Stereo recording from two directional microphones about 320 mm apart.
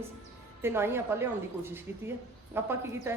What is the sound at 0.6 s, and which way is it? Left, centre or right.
A woman's voice, centre.